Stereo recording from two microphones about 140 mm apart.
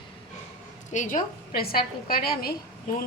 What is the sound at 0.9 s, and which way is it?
A woman's voice, 70° left (ahead or behind).